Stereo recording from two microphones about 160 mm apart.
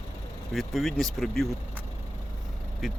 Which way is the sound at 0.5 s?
Centre (ahead or behind).